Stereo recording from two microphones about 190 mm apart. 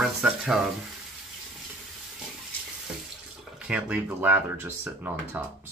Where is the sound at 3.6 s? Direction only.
5° right (ahead or behind).